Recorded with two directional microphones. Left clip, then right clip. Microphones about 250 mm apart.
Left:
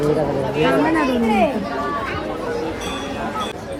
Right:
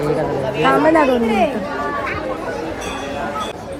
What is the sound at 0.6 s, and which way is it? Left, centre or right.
Speech, centre.